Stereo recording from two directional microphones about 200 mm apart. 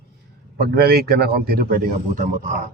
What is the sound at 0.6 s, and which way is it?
A man's voice, 50° right (ahead or behind).